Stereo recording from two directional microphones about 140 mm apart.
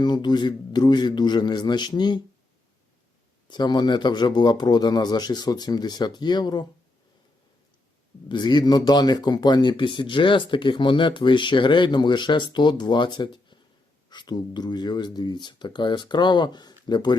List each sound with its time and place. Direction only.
0.0 s speech: 30° left (ahead or behind)
3.5 s speech: 30° left (ahead or behind)
8.3 s speech: 30° left (ahead or behind)